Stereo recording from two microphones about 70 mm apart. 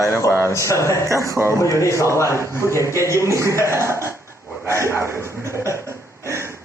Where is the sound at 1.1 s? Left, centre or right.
Right.